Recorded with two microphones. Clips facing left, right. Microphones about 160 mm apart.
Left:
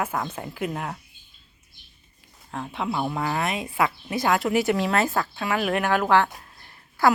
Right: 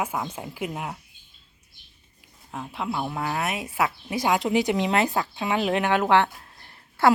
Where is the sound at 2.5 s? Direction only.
5° right (ahead or behind); by 7.1 s 30° right (ahead or behind).